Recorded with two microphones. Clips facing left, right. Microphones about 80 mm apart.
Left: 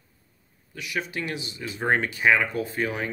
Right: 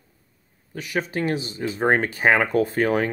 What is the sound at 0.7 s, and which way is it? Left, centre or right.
Speech, right.